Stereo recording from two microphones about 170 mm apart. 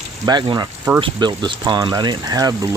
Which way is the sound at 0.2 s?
25° right (ahead or behind).